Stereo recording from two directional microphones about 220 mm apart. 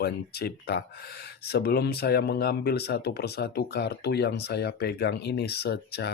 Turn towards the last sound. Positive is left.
turn(degrees=50)  # may be behind; listen again after turning